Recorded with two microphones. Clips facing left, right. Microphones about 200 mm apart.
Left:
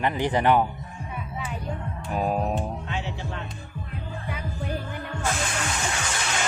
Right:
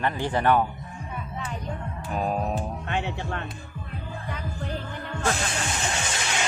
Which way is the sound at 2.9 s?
55° right (ahead or behind).